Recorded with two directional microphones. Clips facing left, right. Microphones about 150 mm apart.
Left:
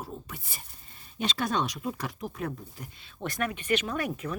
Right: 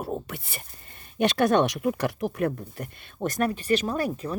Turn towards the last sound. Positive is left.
turn(degrees=-35)  # may be behind; listen again after turning